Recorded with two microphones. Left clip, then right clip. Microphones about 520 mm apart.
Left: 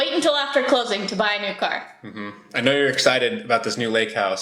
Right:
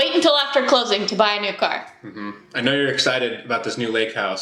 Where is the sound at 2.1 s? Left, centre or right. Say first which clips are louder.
Left 1 dB; left.